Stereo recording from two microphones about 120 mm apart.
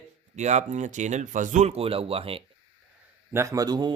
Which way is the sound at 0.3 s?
80° right.